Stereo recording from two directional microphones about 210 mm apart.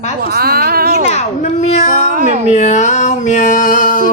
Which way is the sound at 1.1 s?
35° left (ahead or behind).